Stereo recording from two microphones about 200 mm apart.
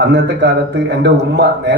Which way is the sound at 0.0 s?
60° right (ahead or behind).